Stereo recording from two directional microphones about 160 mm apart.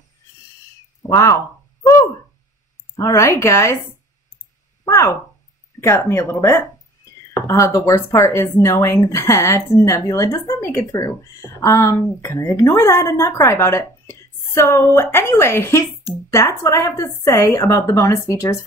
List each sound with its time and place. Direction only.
1.0 s a sound: 20° left (ahead or behind)
3.0 s speech: 20° left (ahead or behind)
4.8 s speech: 20° left (ahead or behind)